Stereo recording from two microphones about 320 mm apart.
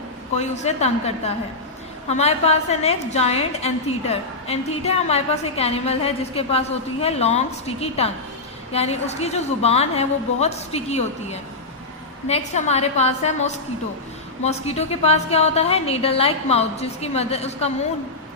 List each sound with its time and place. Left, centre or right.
0.3 s a woman's voice: left